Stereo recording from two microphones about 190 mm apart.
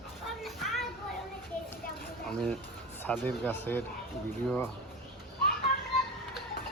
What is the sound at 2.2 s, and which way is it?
Speech, 5° left (ahead or behind).